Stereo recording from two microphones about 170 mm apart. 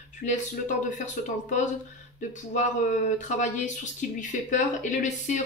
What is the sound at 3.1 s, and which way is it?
Speech, 45° left (ahead or behind).